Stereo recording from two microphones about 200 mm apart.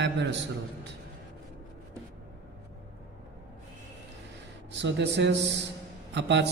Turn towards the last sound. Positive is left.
turn(degrees=-60)  # may be behind; listen again after turning